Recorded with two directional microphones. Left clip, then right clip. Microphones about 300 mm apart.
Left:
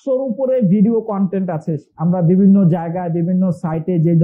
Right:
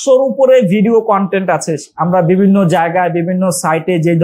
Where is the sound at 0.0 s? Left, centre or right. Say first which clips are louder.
Right 9 dB; right.